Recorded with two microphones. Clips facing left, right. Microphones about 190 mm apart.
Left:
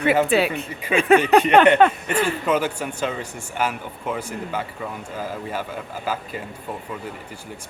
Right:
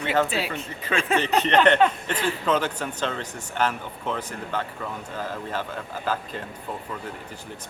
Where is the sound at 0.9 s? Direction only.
60° left (ahead or behind).